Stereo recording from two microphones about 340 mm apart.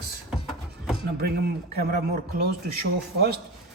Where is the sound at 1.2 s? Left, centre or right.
Right.